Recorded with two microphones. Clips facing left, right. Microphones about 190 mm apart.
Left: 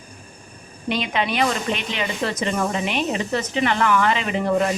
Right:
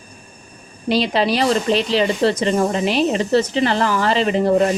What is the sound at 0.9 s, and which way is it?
Speech, 35° right (ahead or behind).